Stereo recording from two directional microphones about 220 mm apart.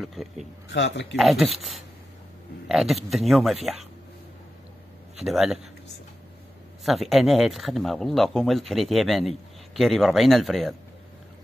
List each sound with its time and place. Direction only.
0.0 s speech: centre (ahead or behind)
0.7 s a man's voice: 55° left (ahead or behind)
1.1 s speech: centre (ahead or behind)
5.1 s a man's voice: centre (ahead or behind)
6.8 s speech: centre (ahead or behind)